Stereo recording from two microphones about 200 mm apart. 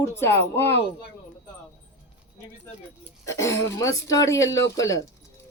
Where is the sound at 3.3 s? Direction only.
15° left (ahead or behind).